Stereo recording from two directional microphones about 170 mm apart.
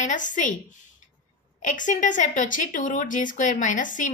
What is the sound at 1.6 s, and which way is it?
A woman's voice, 50° left (ahead or behind).